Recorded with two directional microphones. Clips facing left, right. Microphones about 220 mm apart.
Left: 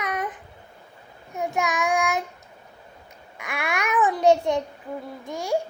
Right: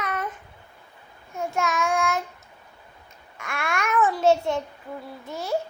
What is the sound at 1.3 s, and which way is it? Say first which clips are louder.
Child singing: left 1 dB; 15° left (ahead or behind).